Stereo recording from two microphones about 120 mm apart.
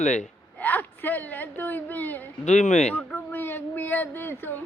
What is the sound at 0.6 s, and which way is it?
Speech, 15° left (ahead or behind).